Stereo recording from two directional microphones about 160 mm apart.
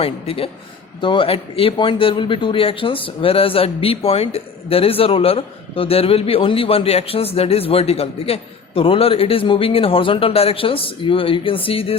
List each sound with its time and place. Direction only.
0.0 s speech: 35° left (ahead or behind)